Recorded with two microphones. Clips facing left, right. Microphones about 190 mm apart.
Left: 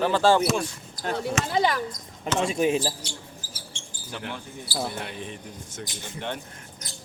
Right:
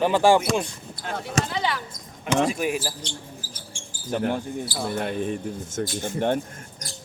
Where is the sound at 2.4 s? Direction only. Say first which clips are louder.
Left 5 dB; 25° left (ahead or behind).